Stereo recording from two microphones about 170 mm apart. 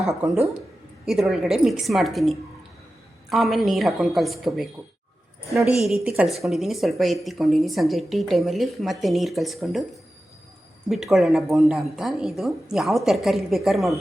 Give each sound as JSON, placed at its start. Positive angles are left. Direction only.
{"t": 0.1, "sound": "speech", "side_deg": -15}
{"t": 5.5, "sound": "speech", "side_deg": -15}
{"t": 5.8, "sound": "speech", "side_deg": -5}